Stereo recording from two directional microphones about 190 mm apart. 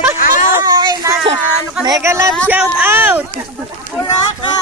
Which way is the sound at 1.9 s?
15° right (ahead or behind).